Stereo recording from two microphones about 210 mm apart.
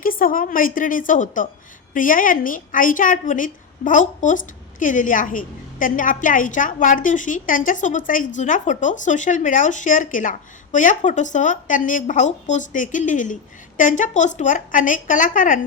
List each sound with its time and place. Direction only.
0.0 s speech: 40° left (ahead or behind)